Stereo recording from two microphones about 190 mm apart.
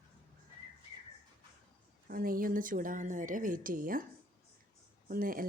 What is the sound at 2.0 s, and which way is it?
Speech, 50° right (ahead or behind).